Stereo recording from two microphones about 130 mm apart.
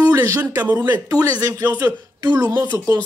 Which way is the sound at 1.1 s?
30° right (ahead or behind).